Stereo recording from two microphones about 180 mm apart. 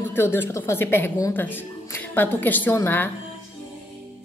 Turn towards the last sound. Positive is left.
turn(degrees=10)  # may be behind; listen again after turning